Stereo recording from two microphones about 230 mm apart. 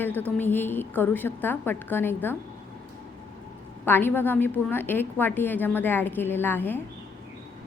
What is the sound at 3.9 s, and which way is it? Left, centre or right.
A woman's voice, centre.